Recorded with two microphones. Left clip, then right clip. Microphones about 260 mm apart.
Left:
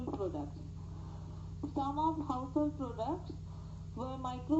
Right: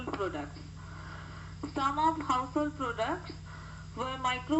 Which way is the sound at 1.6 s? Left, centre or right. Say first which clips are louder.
Right 5 dB; right.